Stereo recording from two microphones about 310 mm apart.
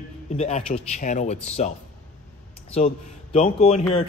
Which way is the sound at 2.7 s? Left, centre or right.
Centre.